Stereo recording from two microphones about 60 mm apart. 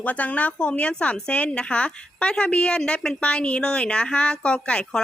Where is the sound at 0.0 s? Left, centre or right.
Left.